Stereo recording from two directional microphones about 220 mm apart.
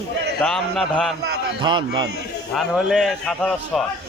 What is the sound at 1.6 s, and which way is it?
Speech, 20° right (ahead or behind).